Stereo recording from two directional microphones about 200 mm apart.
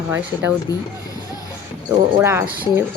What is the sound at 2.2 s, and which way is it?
Speech, 10° right (ahead or behind).